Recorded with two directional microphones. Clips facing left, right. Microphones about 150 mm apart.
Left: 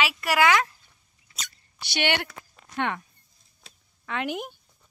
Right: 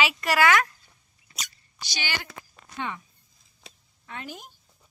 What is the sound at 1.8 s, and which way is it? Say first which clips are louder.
A woman's voice: left 8 dB; 65° left (ahead or behind).